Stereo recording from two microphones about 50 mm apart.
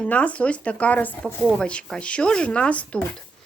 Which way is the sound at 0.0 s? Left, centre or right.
Left.